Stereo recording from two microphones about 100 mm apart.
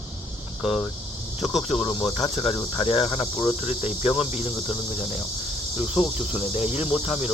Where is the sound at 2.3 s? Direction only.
90° left.